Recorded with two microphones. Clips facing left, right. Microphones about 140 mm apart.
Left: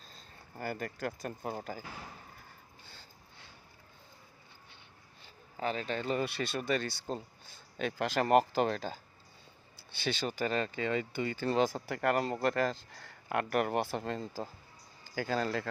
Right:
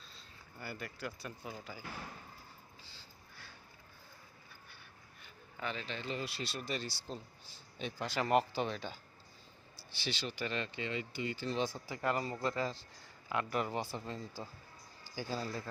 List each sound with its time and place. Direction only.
0.0 s speech: 45° left (ahead or behind)
2.8 s sniff: 50° left (ahead or behind)
5.2 s speech: 35° left (ahead or behind); by 7.6 s 50° left (ahead or behind)
7.9 s speech: 90° left
8.1 s speech: 50° left (ahead or behind)
8.6 s speech: 40° left (ahead or behind)
10.0 s speech: 50° left (ahead or behind)
11.5 s a man's voice: 90° left